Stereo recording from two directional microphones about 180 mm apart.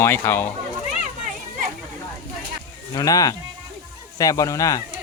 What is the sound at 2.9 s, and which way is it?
Speech, 20° left (ahead or behind).